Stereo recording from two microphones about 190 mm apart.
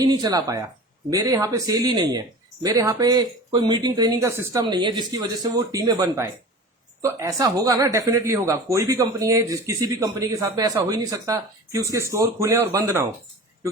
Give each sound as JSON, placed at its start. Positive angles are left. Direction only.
{"t": 0.0, "sound": "speech", "side_deg": -20}